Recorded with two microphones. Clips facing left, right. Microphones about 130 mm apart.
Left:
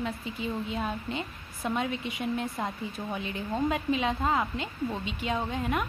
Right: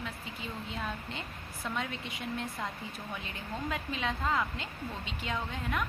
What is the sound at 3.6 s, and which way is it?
A woman's voice, 20° left (ahead or behind).